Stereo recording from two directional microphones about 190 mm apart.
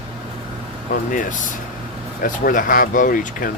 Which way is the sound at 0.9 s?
45° left (ahead or behind).